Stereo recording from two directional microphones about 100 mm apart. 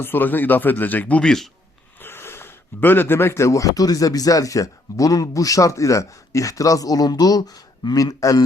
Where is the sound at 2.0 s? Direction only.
25° left (ahead or behind).